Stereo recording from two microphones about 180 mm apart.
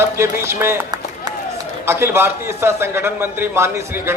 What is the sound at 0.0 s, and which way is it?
A man's voice, 15° right (ahead or behind).